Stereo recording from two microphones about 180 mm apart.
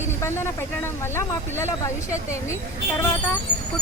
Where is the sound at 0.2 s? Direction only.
15° left (ahead or behind).